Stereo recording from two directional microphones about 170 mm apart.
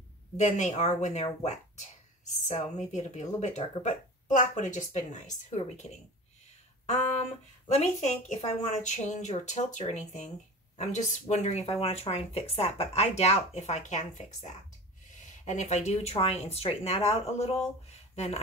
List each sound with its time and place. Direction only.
0.4 s a woman's voice: 40° left (ahead or behind)
6.9 s a woman's voice: 40° left (ahead or behind)